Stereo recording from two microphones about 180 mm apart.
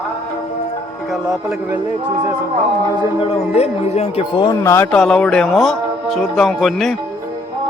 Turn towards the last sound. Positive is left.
turn(degrees=0)  # may be behind; listen again after turning